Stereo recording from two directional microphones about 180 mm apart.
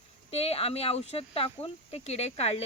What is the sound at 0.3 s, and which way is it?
Speech, 35° left (ahead or behind).